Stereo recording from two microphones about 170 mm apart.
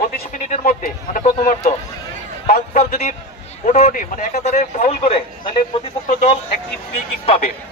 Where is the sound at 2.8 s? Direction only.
45° left (ahead or behind).